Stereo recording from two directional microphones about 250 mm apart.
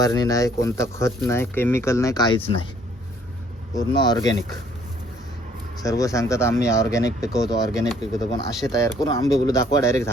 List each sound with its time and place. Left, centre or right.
0.0 s speech: centre
3.8 s speech: centre
5.8 s speech: centre